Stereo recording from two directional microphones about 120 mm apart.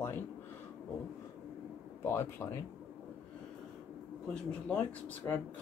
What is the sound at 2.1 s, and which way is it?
Speech, 20° left (ahead or behind).